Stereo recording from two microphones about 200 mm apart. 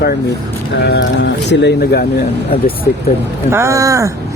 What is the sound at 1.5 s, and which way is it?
Speech, 55° left (ahead or behind).